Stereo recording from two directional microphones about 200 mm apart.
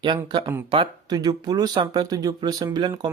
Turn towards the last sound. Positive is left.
turn(degrees=-20)  # may be behind; listen again after turning